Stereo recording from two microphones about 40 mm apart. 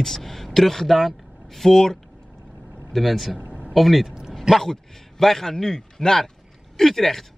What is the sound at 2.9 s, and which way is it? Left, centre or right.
Speech, centre.